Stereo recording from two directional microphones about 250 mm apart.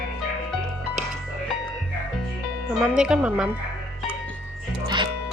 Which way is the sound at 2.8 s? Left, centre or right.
Centre.